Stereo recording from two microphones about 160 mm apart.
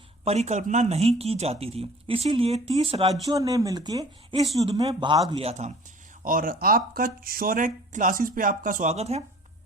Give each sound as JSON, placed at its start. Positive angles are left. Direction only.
{"t": 0.3, "sound": "speech", "side_deg": -45}
{"t": 3.2, "sound": "speech", "side_deg": -25}
{"t": 5.3, "sound": "speech", "side_deg": -40}
{"t": 6.2, "sound": "speech", "side_deg": -60}